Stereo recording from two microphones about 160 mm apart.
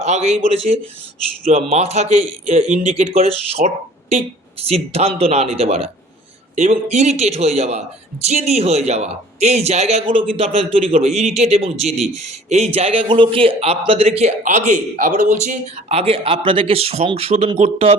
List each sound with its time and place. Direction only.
0.0 s a man's voice: 45° right (ahead or behind)